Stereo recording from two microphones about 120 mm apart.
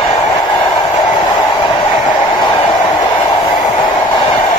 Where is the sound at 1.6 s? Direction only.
40° left (ahead or behind).